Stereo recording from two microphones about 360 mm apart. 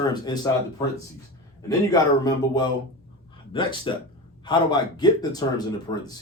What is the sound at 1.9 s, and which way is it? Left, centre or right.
Speech, centre.